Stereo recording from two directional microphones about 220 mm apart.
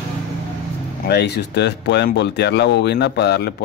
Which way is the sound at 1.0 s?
50° left (ahead or behind).